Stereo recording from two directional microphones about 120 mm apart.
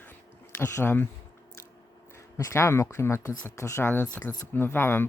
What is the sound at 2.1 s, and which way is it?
Speech, 25° left (ahead or behind).